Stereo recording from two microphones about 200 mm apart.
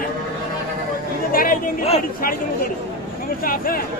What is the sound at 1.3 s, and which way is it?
Speech, 45° left (ahead or behind).